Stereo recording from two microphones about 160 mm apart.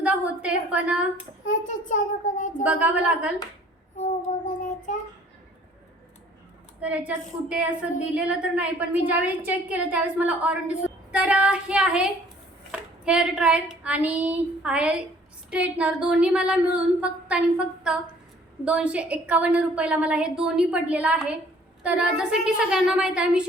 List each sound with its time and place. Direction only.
0.0 s a sound: 10° right (ahead or behind)
1.5 s child singing: 55° left (ahead or behind)
2.6 s a woman's voice: 10° right (ahead or behind)
6.8 s a woman's voice: 10° right (ahead or behind)